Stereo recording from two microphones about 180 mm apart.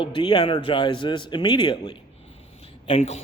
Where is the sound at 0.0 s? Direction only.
25° left (ahead or behind).